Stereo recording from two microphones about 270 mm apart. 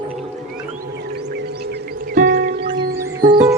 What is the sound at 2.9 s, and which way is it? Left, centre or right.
Music, centre.